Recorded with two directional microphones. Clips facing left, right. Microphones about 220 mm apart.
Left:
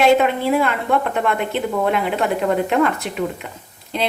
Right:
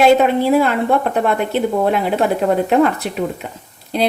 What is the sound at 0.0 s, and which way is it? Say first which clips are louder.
A woman's voice: right 3 dB; 35° right (ahead or behind).